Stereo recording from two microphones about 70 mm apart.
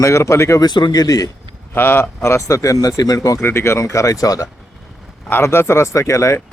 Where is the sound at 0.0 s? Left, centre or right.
Left.